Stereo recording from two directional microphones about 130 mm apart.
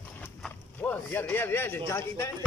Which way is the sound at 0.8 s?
15° left (ahead or behind).